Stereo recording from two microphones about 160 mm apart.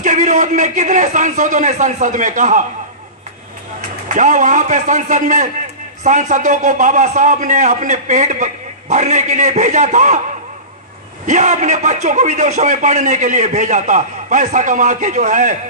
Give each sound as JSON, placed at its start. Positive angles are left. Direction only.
{"t": 0.0, "sound": "a man's voice", "side_deg": -50}
{"t": 4.1, "sound": "a man's voice", "side_deg": -50}
{"t": 11.2, "sound": "a man's voice", "side_deg": -50}